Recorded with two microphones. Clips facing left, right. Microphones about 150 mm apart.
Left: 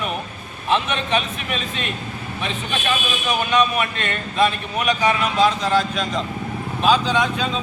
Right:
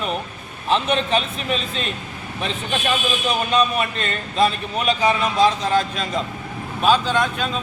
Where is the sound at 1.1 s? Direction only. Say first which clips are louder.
Right 1 dB; 35° right (ahead or behind).